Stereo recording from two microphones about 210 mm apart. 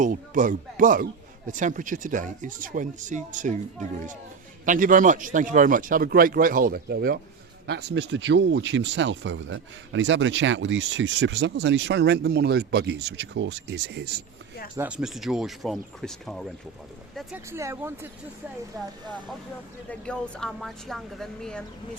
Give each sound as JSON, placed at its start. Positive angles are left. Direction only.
{"t": 0.0, "sound": "speech", "side_deg": -40}
{"t": 14.8, "sound": "a woman's voice", "side_deg": -5}
{"t": 17.2, "sound": "a woman's voice", "side_deg": -10}